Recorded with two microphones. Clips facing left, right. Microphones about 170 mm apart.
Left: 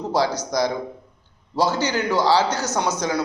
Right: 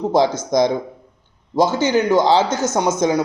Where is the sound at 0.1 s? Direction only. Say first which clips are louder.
Right 4 dB; 20° right (ahead or behind).